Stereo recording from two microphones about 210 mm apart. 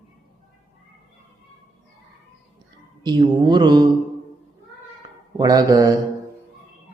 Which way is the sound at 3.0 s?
20° right (ahead or behind).